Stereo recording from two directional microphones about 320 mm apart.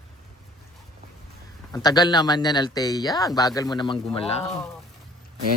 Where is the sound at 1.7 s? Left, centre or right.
Centre.